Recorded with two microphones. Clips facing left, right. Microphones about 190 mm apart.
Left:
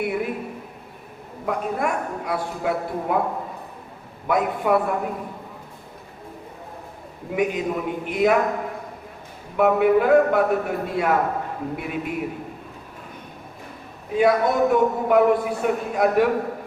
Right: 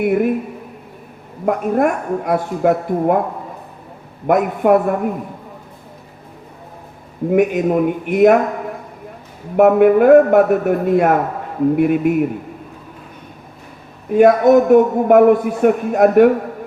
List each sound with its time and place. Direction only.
0.0 s a man's voice: 55° right (ahead or behind)
1.5 s a man's voice: 50° right (ahead or behind)
4.3 s a man's voice: 50° right (ahead or behind)
7.3 s a man's voice: 50° right (ahead or behind)
9.6 s a man's voice: 50° right (ahead or behind)
14.1 s a man's voice: 45° right (ahead or behind)